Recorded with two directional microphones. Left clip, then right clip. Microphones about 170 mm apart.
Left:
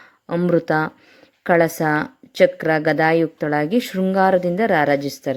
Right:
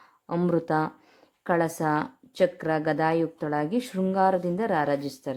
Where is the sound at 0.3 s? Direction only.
15° left (ahead or behind).